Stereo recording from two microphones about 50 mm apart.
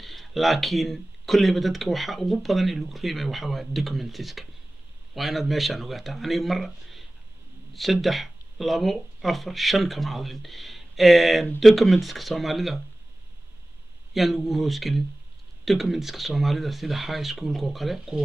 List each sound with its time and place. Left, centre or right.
0.0 s speech: centre
14.1 s speech: centre